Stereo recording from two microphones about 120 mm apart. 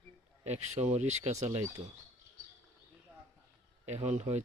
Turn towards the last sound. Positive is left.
turn(degrees=-75)  # may be behind; listen again after turning